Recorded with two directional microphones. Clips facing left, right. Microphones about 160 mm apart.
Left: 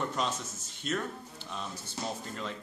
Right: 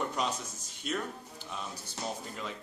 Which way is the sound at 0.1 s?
10° right (ahead or behind).